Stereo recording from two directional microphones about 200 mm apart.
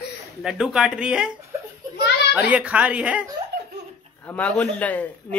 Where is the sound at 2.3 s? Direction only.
5° right (ahead or behind).